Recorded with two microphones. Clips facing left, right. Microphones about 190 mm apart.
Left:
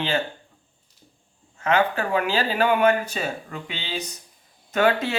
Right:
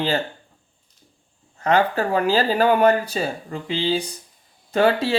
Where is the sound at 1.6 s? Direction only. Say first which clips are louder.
Right 3 dB; 35° right (ahead or behind).